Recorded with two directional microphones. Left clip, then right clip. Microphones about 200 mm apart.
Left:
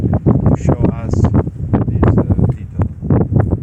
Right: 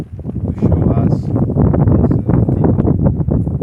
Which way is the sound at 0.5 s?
35° left (ahead or behind).